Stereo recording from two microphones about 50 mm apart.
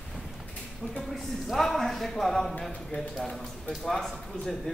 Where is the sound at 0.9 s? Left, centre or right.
Centre.